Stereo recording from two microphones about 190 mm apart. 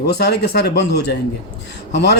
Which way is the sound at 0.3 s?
60° left (ahead or behind).